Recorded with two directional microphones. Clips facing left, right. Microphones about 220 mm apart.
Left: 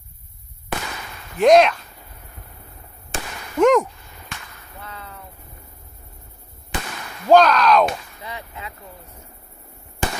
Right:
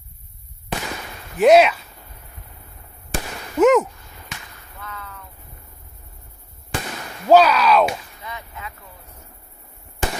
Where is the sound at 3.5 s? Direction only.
5° right (ahead or behind).